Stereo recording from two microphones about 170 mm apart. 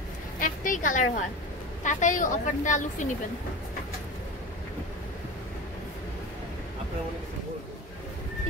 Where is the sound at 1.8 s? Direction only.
45° left (ahead or behind).